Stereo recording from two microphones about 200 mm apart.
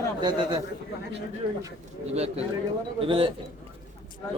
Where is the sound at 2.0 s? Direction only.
30° right (ahead or behind).